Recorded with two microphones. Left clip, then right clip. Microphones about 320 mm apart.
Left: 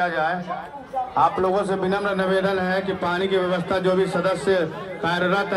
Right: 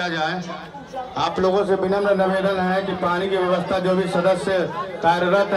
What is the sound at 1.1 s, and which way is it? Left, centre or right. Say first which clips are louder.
A man's voice: even; centre.